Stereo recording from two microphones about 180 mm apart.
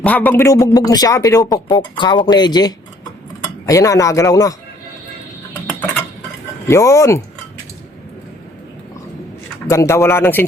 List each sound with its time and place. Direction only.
0.0 s speech: 10° left (ahead or behind)
6.7 s speech: 15° left (ahead or behind)
9.6 s speech: 15° left (ahead or behind)